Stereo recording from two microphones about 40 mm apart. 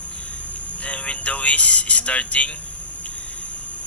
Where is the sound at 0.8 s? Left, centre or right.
Left.